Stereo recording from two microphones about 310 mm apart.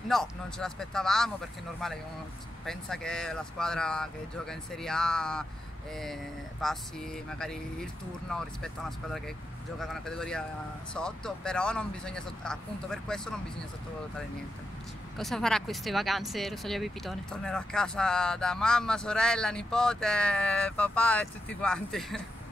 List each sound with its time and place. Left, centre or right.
0.1 s speech: centre
2.6 s speech: centre
6.6 s speech: centre
9.8 s speech: centre
15.1 s speech: centre